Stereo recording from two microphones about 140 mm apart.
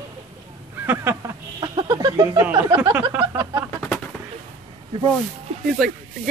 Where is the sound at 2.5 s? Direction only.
30° right (ahead or behind).